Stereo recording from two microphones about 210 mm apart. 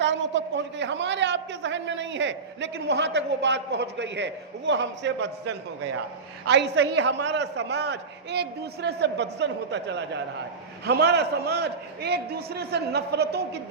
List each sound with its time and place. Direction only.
0.0 s a man's voice: 60° right (ahead or behind)